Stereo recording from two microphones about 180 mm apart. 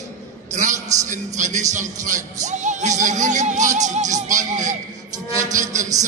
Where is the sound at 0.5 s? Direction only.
45° right (ahead or behind).